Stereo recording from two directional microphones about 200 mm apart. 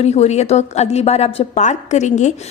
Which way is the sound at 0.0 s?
35° left (ahead or behind).